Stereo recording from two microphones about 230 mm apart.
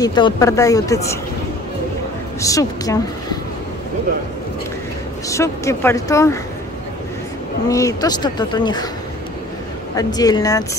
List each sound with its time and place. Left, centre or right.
0.0 s speech: centre
2.4 s speech: centre
5.3 s speech: centre
7.6 s speech: centre
9.9 s speech: centre